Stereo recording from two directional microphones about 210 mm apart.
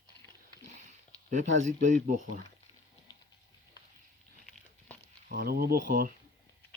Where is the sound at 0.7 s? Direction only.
35° right (ahead or behind).